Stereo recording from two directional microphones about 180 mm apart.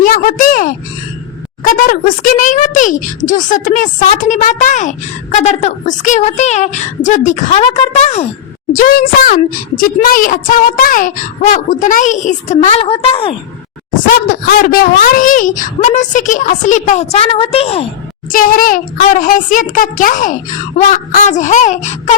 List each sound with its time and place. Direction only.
0.0 s speech: 50° left (ahead or behind)
8.7 s speech: 50° left (ahead or behind); by 13.3 s 30° left (ahead or behind)
13.9 s speech: 50° left (ahead or behind); by 17.8 s 35° left (ahead or behind)
18.3 s speech: 50° left (ahead or behind)